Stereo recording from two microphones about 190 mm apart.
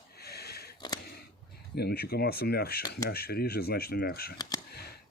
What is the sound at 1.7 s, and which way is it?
Speech, 55° left (ahead or behind).